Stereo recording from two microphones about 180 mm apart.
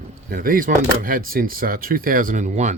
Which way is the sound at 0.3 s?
55° right (ahead or behind).